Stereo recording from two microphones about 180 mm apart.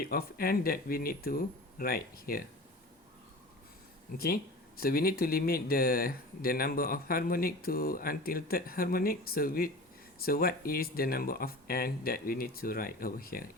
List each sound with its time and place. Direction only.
0.0 s speech: 55° left (ahead or behind)
4.8 s speech: 55° left (ahead or behind)